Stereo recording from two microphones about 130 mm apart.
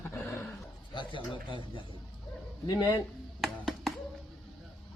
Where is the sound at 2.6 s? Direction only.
30° left (ahead or behind).